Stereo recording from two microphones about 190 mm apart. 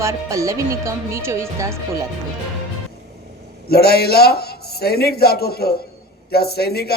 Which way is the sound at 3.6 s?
55° left (ahead or behind).